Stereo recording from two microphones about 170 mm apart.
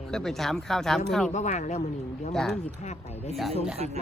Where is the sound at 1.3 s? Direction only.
45° left (ahead or behind).